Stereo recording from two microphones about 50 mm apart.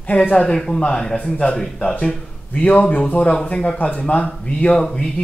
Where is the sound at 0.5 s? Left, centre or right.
Centre.